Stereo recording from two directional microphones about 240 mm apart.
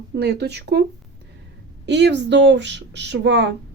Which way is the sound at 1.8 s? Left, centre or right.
Right.